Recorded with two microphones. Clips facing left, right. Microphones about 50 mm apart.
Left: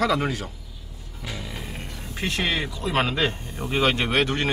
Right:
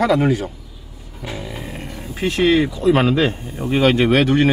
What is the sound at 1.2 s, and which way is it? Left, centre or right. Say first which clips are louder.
Music: right 6 dB; right.